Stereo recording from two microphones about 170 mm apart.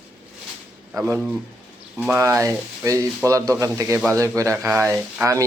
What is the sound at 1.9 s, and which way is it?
A man's voice, 10° right (ahead or behind).